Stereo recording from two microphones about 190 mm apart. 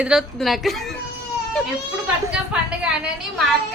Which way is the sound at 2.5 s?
5° right (ahead or behind).